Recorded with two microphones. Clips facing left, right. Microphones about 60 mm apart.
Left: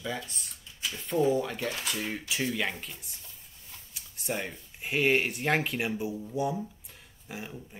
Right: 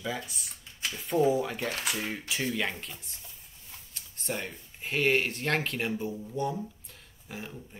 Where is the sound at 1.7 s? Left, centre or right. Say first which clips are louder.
Right 1 dB; right.